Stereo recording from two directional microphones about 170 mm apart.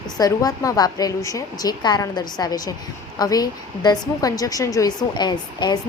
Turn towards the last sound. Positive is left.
turn(degrees=25)  # may be behind; listen again after turning